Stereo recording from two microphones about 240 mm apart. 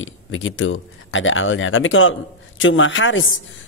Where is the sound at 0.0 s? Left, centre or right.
Left.